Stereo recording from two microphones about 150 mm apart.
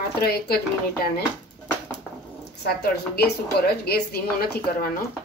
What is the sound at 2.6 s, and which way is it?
A woman's voice, 90° left.